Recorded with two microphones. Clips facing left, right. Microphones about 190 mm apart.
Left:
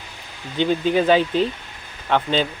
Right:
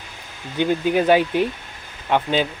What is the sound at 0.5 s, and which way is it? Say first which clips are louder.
Speech: even; 10° right (ahead or behind).